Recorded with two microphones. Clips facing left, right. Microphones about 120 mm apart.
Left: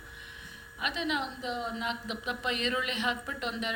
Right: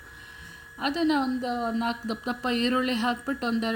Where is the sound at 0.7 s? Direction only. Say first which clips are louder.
Right 8 dB; 35° right (ahead or behind).